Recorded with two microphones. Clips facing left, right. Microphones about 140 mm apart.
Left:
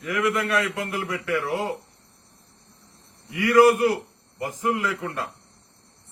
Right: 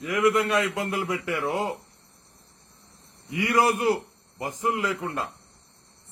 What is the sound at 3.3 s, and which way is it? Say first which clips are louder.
Speech: left 3 dB; 20° right (ahead or behind).